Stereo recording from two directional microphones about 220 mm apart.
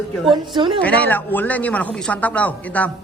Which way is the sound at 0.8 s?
5° left (ahead or behind).